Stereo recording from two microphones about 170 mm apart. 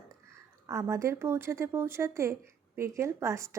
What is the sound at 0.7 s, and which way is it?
Speech, 15° right (ahead or behind).